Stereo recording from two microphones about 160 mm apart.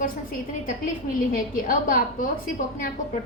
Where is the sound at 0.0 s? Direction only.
60° left (ahead or behind).